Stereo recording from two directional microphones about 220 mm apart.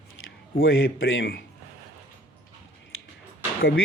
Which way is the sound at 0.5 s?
60° left (ahead or behind).